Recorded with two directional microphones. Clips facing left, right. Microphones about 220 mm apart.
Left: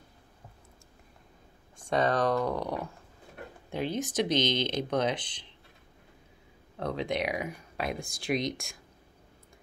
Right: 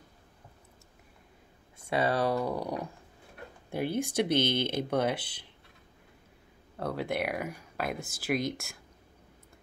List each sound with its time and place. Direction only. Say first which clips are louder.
1.9 s speech: left 1 dB; 10° right (ahead or behind)
4.2 s speech: even; 60° right (ahead or behind)
4.6 s speech: even; 10° right (ahead or behind)
6.8 s speech: left 1 dB; 5° right (ahead or behind)